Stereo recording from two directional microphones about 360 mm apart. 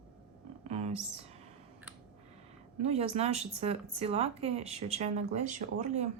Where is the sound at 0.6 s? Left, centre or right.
Centre.